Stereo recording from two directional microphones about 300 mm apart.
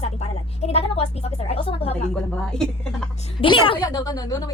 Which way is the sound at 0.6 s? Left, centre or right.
Centre.